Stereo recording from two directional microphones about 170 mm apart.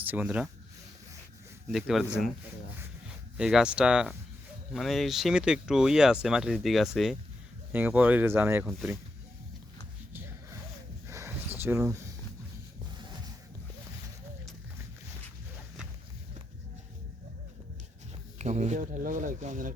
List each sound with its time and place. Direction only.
0.0 s speech: 10° right (ahead or behind)
1.7 s speech: centre (ahead or behind)
3.3 s speech: 5° right (ahead or behind)
10.1 s music: 10° right (ahead or behind)
11.1 s a sound: 15° right (ahead or behind)
11.5 s speech: 10° right (ahead or behind)
18.3 s speech: 45° right (ahead or behind)